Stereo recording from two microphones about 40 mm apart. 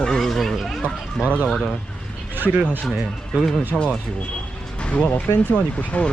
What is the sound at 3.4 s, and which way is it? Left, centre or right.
Speech, centre.